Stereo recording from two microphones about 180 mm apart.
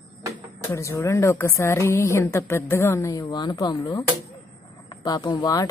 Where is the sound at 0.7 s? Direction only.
15° left (ahead or behind).